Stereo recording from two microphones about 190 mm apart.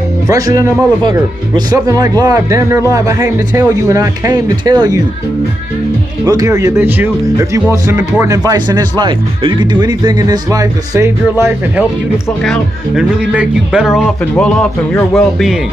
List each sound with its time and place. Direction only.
0.3 s speech: 20° right (ahead or behind)
6.2 s speech: 15° right (ahead or behind); by 15.6 s centre (ahead or behind)